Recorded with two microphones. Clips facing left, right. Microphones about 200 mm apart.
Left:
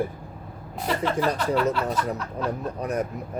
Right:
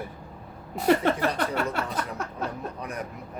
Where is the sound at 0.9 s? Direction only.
55° right (ahead or behind).